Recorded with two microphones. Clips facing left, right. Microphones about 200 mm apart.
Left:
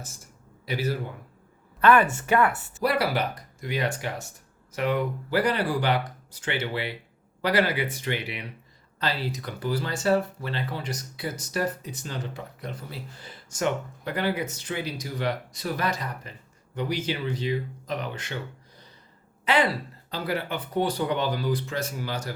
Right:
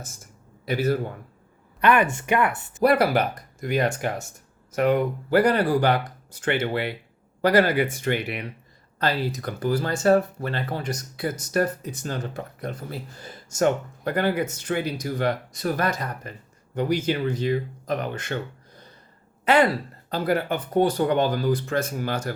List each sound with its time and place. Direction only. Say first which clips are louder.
0.6 s a man's voice: right 5 dB; 50° right (ahead or behind)
1.8 s speech: even; 15° right (ahead or behind)
2.8 s speech: right 6 dB; 50° right (ahead or behind)
19.5 s speech: right 5 dB; 50° right (ahead or behind)